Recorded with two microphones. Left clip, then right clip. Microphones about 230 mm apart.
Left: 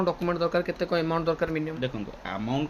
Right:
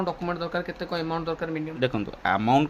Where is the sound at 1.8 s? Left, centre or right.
Right.